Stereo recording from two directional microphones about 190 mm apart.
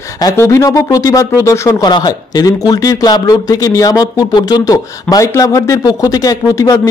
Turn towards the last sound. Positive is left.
turn(degrees=20)  # may be behind; listen again after turning